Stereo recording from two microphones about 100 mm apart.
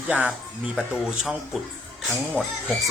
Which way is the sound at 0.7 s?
5° right (ahead or behind).